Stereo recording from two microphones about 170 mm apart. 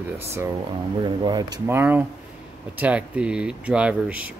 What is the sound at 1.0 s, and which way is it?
Speech, 25° right (ahead or behind).